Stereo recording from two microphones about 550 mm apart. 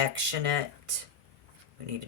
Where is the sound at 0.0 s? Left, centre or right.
Right.